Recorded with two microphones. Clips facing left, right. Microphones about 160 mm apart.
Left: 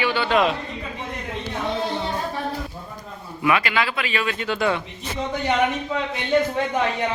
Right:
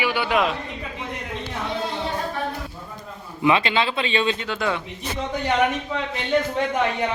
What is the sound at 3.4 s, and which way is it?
Speech, 25° right (ahead or behind).